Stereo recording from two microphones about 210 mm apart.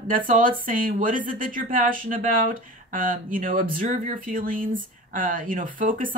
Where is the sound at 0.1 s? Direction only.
40° right (ahead or behind).